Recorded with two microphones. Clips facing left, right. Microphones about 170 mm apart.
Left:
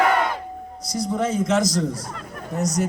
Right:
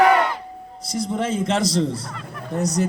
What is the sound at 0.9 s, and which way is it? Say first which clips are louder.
A man's voice: even; 25° right (ahead or behind).